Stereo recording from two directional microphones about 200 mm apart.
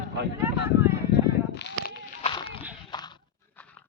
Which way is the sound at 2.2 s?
25° left (ahead or behind).